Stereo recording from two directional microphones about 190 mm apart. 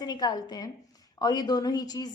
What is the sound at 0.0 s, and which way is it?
A woman's voice, 20° left (ahead or behind).